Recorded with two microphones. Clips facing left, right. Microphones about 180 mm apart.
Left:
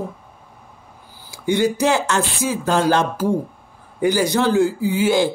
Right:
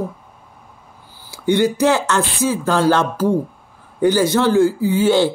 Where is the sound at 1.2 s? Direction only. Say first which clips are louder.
Right 2 dB; 15° left (ahead or behind).